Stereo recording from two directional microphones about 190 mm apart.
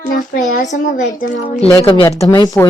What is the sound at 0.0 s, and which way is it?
A child's voice, 45° left (ahead or behind).